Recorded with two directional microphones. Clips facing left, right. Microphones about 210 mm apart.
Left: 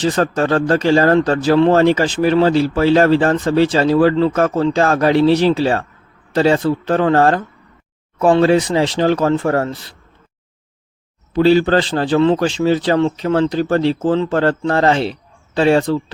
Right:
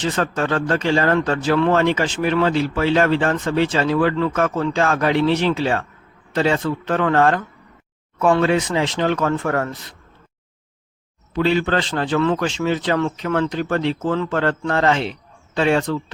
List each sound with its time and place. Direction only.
0.0 s speech: 35° left (ahead or behind)
11.3 s speech: 35° left (ahead or behind)